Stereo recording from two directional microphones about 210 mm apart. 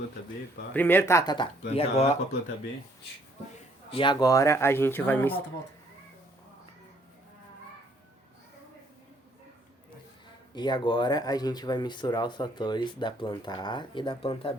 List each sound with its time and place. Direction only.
0.7 s speech: 10° left (ahead or behind); by 2.0 s 30° left (ahead or behind)
3.9 s speech: 20° left (ahead or behind)
10.5 s speech: 20° left (ahead or behind)